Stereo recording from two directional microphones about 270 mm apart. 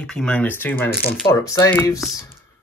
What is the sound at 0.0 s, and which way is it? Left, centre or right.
Speech, centre.